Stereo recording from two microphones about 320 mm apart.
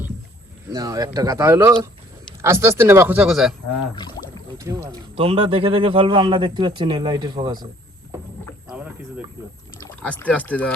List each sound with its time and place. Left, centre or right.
0.7 s speech: centre
4.5 s speech: centre
8.6 s rowboat: centre
9.8 s speech: centre